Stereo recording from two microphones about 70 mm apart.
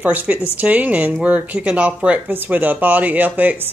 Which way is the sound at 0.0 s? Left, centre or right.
Right.